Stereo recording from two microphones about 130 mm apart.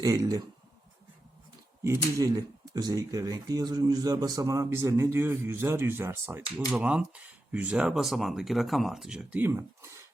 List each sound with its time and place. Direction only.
0.0 s speech: 25° right (ahead or behind)
1.8 s speech: 25° right (ahead or behind)